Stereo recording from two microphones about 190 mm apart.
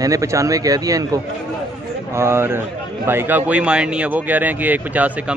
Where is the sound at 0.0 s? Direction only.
15° right (ahead or behind).